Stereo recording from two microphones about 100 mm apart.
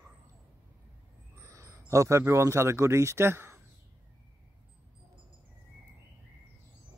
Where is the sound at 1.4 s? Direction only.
30° right (ahead or behind).